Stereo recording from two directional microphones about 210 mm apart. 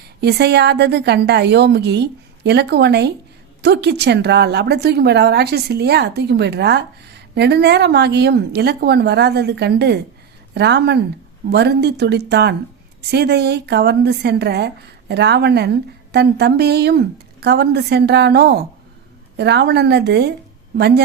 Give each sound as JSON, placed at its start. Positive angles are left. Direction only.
{"t": 0.2, "sound": "speech", "side_deg": -50}